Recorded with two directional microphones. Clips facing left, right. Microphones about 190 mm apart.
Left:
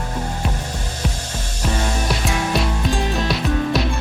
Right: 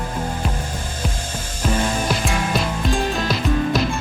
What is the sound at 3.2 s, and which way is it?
Music, centre (ahead or behind).